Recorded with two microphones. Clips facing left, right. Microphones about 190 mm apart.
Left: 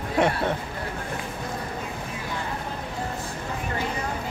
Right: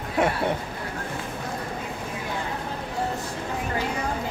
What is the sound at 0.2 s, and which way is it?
Speech, 5° right (ahead or behind).